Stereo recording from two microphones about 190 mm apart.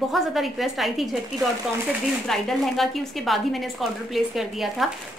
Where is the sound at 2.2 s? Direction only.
Centre (ahead or behind).